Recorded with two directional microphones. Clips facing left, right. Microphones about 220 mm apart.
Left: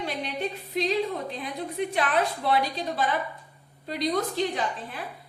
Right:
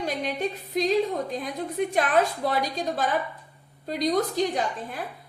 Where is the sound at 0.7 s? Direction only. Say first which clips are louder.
Right 3 dB; 45° right (ahead or behind).